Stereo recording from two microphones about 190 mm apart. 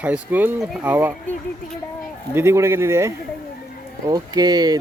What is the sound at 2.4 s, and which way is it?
Speech, 15° right (ahead or behind).